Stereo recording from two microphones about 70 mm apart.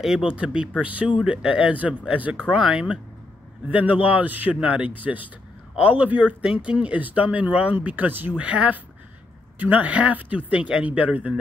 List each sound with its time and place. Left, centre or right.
0.0 s speech: centre